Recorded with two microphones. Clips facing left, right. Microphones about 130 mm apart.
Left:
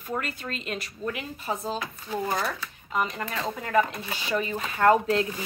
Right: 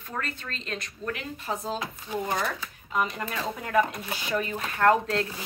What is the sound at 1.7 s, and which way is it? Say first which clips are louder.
Speech: even; 20° right (ahead or behind).